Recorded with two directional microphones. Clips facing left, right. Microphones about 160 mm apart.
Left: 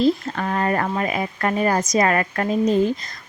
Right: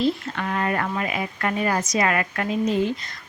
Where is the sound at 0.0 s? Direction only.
35° left (ahead or behind).